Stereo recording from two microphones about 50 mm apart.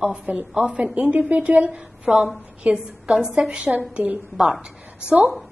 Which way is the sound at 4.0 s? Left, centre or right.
Right.